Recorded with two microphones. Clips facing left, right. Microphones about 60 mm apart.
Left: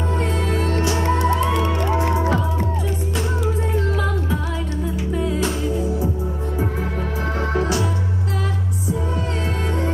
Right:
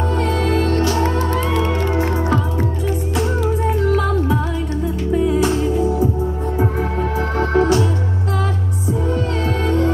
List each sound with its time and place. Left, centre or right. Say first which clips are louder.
1.0 s music: even; right
7.3 s music: right 7 dB; right